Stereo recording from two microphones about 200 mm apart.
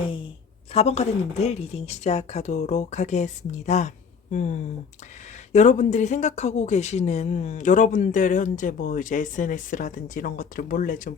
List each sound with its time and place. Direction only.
0.7 s speech: 30° left (ahead or behind)